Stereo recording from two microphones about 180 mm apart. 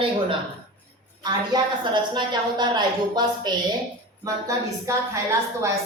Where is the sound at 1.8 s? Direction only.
25° right (ahead or behind).